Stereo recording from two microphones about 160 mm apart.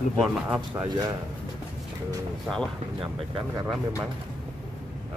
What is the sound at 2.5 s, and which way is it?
Speech, 5° left (ahead or behind).